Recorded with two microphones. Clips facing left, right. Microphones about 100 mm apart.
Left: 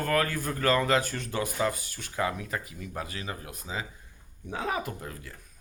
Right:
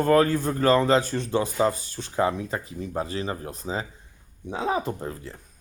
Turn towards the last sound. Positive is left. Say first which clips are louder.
# right 7 dB
turn(degrees=-30)  # may be behind; listen again after turning